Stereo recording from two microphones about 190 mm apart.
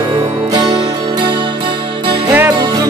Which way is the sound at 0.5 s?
25° right (ahead or behind).